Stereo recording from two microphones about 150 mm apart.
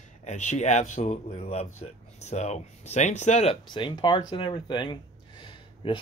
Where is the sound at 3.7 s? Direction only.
30° left (ahead or behind).